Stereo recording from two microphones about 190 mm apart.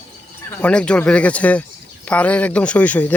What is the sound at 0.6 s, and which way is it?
Speech, 5° left (ahead or behind).